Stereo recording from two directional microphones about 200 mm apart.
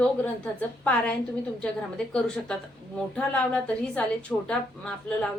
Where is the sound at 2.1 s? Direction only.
5° left (ahead or behind).